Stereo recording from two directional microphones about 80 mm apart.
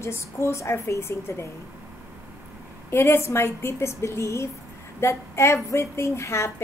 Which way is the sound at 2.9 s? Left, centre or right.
Left.